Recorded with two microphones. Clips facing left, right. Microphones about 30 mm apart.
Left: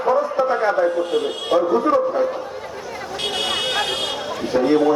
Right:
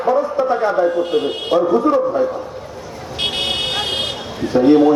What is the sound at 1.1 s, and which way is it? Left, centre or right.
Speech, right.